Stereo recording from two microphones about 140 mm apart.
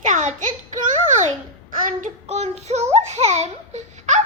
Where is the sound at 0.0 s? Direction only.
60° right (ahead or behind).